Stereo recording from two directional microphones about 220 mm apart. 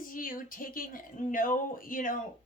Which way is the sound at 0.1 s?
40° left (ahead or behind).